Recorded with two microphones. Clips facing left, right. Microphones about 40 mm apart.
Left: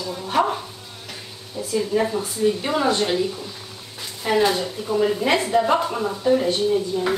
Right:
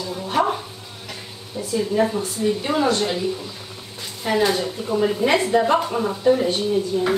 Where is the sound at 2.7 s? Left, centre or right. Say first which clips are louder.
Right 2 dB; centre.